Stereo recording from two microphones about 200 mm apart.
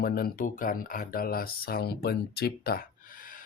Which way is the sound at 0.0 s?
50° left (ahead or behind).